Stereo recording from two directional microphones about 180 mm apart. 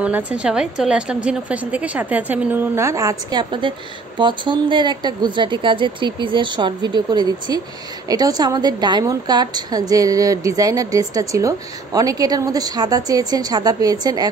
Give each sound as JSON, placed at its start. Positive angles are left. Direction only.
{"t": 0.0, "sound": "a woman's voice", "side_deg": -5}